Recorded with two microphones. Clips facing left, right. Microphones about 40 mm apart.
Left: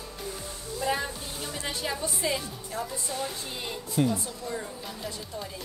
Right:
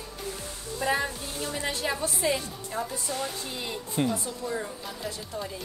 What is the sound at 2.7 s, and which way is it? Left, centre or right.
Speech, right.